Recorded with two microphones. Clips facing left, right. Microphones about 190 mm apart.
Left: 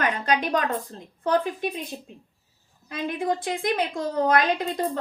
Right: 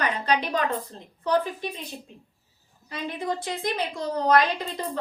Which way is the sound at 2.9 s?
50° left (ahead or behind).